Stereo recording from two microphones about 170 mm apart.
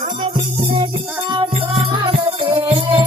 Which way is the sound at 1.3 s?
30° right (ahead or behind).